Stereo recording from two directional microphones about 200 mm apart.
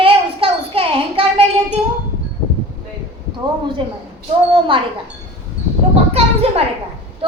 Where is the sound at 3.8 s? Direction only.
25° right (ahead or behind).